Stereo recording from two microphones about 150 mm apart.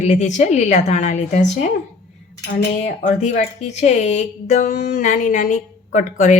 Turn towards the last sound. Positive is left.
turn(degrees=55)  # may be behind; listen again after turning